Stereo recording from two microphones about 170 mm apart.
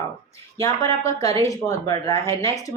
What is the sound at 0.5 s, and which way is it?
Speech, 20° left (ahead or behind).